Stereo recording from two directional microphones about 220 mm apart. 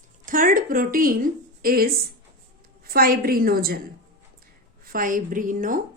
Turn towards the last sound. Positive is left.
turn(degrees=-35)  # may be behind; listen again after turning